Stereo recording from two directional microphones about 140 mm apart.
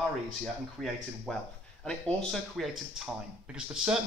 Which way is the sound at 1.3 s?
5° left (ahead or behind).